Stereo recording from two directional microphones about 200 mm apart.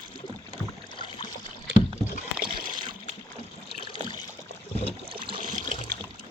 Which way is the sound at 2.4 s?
45° right (ahead or behind).